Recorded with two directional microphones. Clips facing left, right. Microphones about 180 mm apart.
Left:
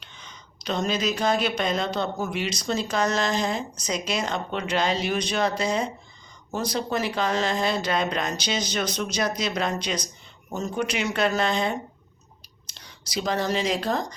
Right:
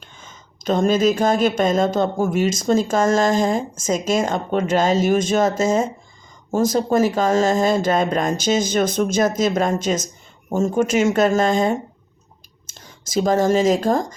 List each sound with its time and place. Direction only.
0.0 s speech: 45° right (ahead or behind)